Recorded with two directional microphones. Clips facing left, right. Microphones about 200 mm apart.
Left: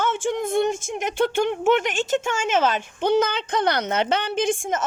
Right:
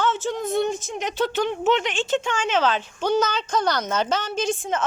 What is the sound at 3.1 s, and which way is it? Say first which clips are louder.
A woman's voice: left 2 dB; 60° left (ahead or behind).